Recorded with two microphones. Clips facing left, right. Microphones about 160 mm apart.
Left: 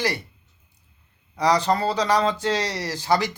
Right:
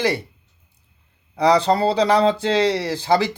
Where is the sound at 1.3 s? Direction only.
30° right (ahead or behind).